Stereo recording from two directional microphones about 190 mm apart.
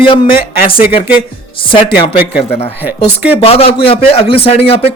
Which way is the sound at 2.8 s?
10° right (ahead or behind).